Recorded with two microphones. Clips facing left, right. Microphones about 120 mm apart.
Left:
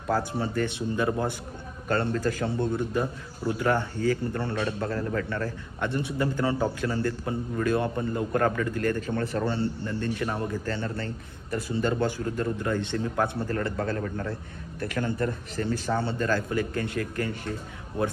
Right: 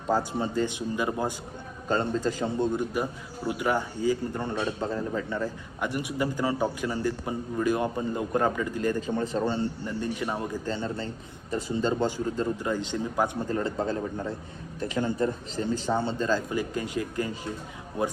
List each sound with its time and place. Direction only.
0.1 s a man's voice: 15° right (ahead or behind)